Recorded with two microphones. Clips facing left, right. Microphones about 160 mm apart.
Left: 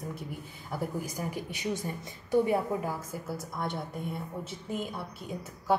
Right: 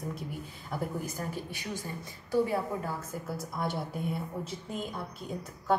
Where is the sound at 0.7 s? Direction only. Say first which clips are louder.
Left 1 dB; 10° left (ahead or behind).